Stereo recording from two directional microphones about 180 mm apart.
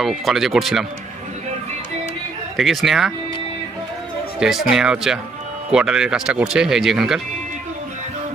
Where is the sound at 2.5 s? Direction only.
Centre (ahead or behind).